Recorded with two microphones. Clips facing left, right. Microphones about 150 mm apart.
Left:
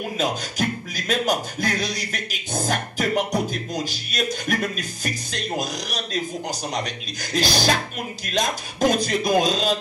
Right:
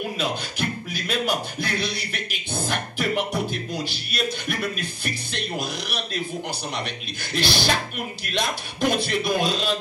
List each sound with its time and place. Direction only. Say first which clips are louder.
0.2 s a man's voice: left 6 dB; 45° left (ahead or behind)